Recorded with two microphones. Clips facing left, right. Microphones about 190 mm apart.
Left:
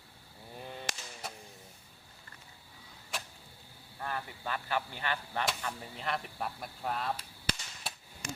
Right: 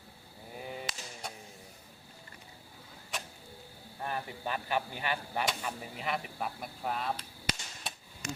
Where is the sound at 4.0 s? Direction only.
20° right (ahead or behind); by 7.1 s centre (ahead or behind).